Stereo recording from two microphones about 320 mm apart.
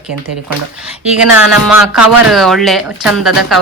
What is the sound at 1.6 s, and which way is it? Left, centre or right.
Speech, centre.